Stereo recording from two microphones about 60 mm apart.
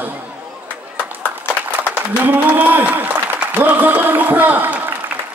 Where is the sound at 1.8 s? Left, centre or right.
Right.